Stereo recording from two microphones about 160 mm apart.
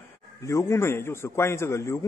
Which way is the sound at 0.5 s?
15° left (ahead or behind).